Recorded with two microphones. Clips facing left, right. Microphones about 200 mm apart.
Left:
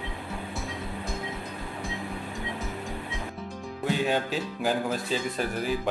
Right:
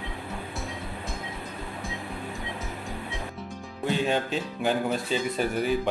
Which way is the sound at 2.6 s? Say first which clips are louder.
Left 1 dB; centre (ahead or behind).